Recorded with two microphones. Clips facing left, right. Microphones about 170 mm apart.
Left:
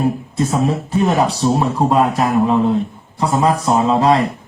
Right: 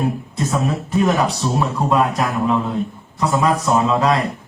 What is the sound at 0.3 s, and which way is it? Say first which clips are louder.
Speech: left 3 dB; 30° left (ahead or behind).